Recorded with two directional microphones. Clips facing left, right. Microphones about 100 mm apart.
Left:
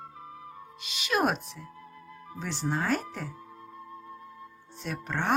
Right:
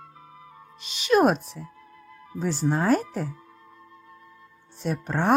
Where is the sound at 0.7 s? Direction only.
35° right (ahead or behind).